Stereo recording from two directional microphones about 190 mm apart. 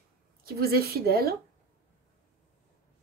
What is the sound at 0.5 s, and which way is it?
Speech, 55° right (ahead or behind).